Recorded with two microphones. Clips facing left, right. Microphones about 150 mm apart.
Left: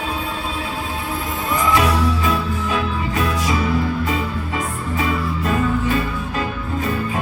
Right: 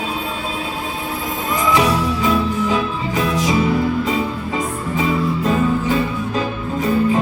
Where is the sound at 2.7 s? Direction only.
20° right (ahead or behind).